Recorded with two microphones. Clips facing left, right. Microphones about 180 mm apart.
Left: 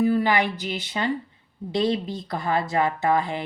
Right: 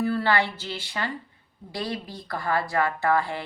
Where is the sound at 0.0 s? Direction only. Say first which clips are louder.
Left 3 dB; 15° left (ahead or behind).